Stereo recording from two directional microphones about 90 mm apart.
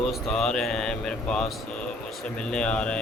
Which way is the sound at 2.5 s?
10° left (ahead or behind).